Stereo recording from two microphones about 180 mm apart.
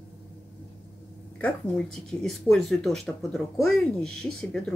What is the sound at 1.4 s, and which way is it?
Speech, 5° left (ahead or behind).